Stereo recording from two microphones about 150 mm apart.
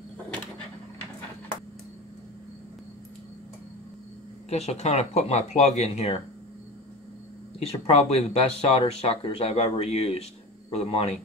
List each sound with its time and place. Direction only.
4.5 s speech: 45° left (ahead or behind)
7.5 s speech: 40° left (ahead or behind)